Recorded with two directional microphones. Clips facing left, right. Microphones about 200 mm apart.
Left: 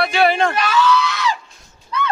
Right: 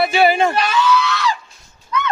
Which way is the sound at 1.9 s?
30° left (ahead or behind).